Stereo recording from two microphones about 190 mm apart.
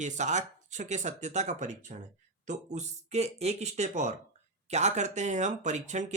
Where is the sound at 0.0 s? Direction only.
40° right (ahead or behind).